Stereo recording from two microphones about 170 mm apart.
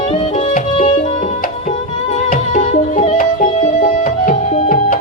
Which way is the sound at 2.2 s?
45° left (ahead or behind).